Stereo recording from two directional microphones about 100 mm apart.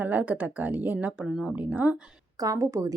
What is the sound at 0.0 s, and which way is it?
Speech, 15° right (ahead or behind).